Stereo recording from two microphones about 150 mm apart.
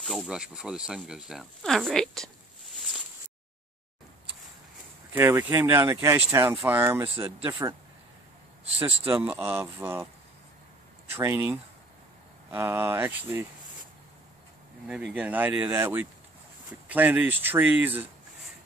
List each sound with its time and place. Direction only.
0.0 s speech: centre (ahead or behind)
5.1 s speech: 15° right (ahead or behind)
7.2 s speech: 35° right (ahead or behind)
8.7 s speech: 15° right (ahead or behind)
11.1 s speech: 20° right (ahead or behind)
12.5 s speech: 15° right (ahead or behind)
14.9 s speech: 5° right (ahead or behind)